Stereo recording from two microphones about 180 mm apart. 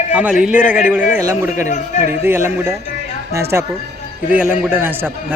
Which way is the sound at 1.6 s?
45° left (ahead or behind).